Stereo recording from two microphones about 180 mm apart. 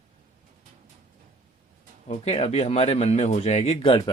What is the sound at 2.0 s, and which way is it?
Speech, 35° left (ahead or behind).